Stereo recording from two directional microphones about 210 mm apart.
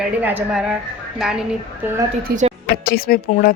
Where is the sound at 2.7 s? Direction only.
45° left (ahead or behind).